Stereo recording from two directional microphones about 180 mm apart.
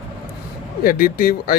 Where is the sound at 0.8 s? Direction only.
55° left (ahead or behind).